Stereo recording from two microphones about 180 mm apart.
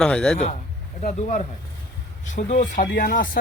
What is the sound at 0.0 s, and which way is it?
Speech, 5° left (ahead or behind).